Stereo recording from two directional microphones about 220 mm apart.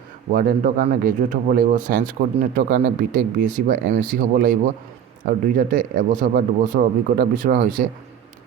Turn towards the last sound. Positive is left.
turn(degrees=-40)  # may be behind; listen again after turning